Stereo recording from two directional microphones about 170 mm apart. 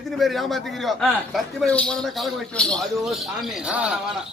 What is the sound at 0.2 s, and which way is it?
A man's voice, centre (ahead or behind).